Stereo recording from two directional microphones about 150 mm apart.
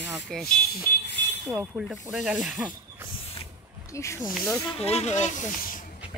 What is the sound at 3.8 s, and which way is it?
Speech, 20° left (ahead or behind).